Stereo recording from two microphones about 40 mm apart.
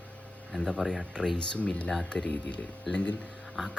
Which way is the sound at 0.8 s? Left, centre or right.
Centre.